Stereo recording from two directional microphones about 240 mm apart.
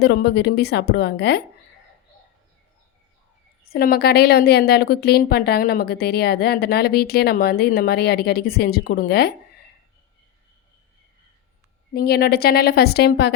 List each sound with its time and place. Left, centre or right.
0.0 s a woman's voice: left
3.7 s a woman's voice: left
11.9 s a woman's voice: left